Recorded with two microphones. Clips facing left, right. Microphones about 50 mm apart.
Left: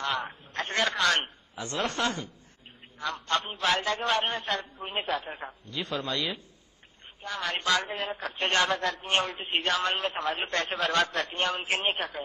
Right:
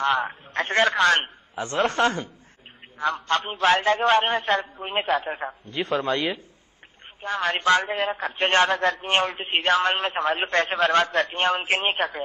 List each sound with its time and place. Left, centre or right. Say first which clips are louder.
0.0 s a man's voice: right 8 dB; right